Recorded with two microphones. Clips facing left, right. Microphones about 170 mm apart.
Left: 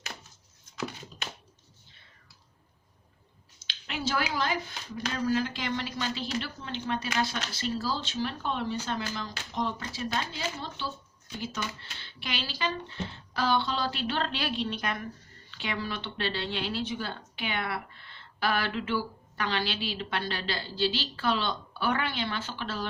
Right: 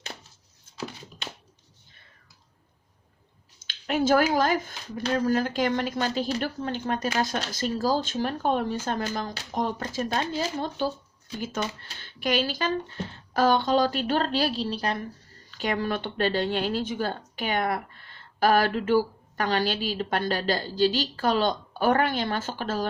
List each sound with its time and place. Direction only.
3.6 s speech: 50° right (ahead or behind); by 15.0 s 35° right (ahead or behind)
15.4 s speech: 45° right (ahead or behind)